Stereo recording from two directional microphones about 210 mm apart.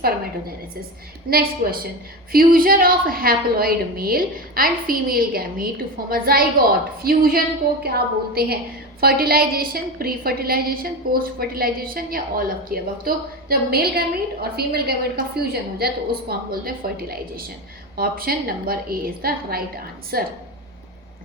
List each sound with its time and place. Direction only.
1.3 s a woman's voice: 45° right (ahead or behind)